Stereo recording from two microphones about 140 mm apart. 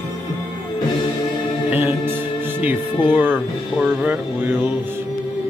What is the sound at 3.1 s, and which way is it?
Speech, 10° right (ahead or behind).